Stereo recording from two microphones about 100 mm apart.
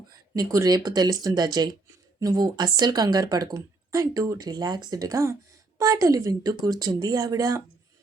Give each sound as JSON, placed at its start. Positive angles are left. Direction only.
{"t": 0.3, "sound": "a woman's voice", "side_deg": -35}